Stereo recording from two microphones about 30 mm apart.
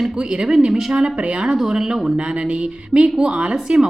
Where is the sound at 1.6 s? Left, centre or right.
Right.